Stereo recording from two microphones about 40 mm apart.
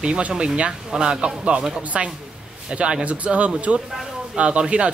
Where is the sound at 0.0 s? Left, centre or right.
Right.